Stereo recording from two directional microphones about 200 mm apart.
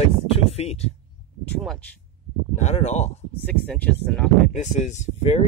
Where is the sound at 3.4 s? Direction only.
5° left (ahead or behind).